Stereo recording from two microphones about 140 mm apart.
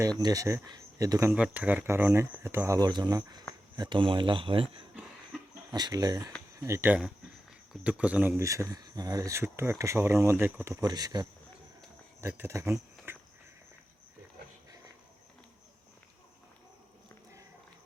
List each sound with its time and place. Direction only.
0.0 s speech: 25° right (ahead or behind)
1.3 s speech: 10° right (ahead or behind); by 4.9 s 40° right (ahead or behind)
5.7 s speech: 25° right (ahead or behind); by 8.4 s 10° right (ahead or behind)
8.4 s speech: 20° right (ahead or behind)
10.8 s speech: 30° right (ahead or behind)
12.3 s speech: 15° right (ahead or behind)